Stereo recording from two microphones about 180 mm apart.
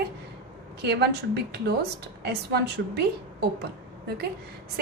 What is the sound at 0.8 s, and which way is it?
A woman's voice, 65° right (ahead or behind).